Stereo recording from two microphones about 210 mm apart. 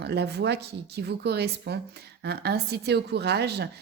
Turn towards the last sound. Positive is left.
turn(degrees=-50)  # may be behind; listen again after turning